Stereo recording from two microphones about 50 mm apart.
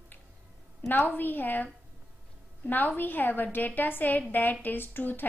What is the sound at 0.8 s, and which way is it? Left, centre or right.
A woman's voice, left.